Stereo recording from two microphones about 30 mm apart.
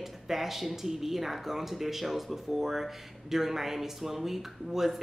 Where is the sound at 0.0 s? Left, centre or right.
Centre.